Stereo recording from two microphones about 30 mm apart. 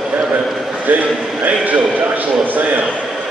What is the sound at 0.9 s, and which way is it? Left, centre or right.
A man's voice, right.